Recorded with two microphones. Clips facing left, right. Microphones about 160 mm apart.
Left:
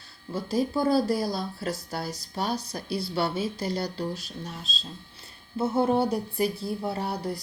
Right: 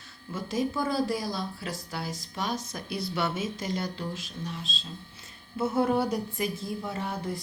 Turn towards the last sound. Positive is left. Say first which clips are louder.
# left 2 dB
turn(degrees=40)  # may be behind; listen again after turning